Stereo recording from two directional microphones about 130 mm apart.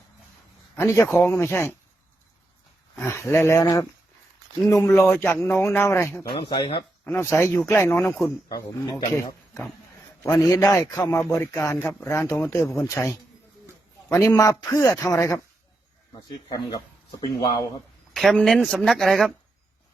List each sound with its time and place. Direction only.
0.8 s a man's voice: 25° left (ahead or behind)
2.9 s a man's voice: 20° left (ahead or behind)
6.4 s speech: 40° left (ahead or behind)
7.0 s a man's voice: 20° left (ahead or behind)
8.4 s speech: 30° left (ahead or behind)
10.2 s a man's voice: 25° left (ahead or behind)
16.5 s speech: 30° left (ahead or behind)
18.1 s speech: centre (ahead or behind)